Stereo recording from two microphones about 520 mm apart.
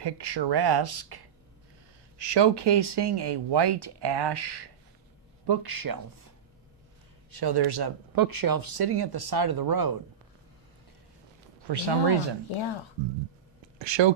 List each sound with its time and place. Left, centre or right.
0.0 s speech: right
11.7 s speech: right
13.7 s speech: right